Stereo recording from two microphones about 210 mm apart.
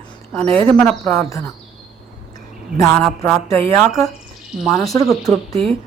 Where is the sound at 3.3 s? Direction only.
15° left (ahead or behind).